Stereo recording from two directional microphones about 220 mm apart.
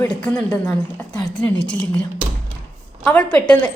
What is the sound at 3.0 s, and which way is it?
Speech, 5° left (ahead or behind).